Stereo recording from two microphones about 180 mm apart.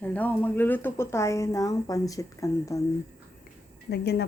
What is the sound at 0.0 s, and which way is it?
Speech, 10° left (ahead or behind).